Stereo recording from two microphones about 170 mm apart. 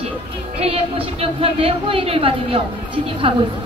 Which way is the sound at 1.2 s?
35° right (ahead or behind).